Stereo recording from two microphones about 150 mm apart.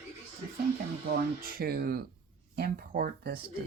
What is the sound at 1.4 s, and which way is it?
Speech, 85° right.